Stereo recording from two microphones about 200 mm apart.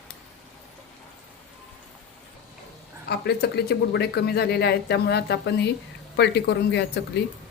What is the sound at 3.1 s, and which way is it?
Speech, 55° left (ahead or behind).